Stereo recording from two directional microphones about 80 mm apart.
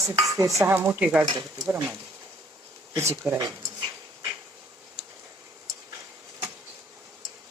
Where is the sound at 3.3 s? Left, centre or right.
Right.